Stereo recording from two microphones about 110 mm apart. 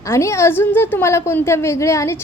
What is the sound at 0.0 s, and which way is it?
A woman's voice, 25° left (ahead or behind).